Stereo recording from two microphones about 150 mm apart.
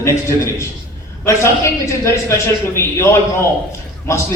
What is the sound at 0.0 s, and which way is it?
A man's voice, 20° left (ahead or behind).